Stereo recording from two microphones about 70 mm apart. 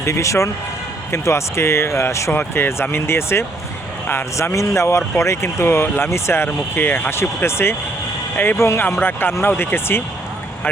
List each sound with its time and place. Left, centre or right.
0.0 s speech: left
2.3 s speech: left
4.5 s speech: left